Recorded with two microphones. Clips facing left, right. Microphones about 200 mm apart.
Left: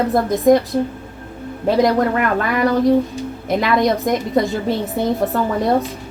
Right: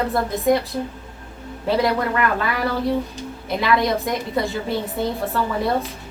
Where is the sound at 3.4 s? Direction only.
45° left (ahead or behind).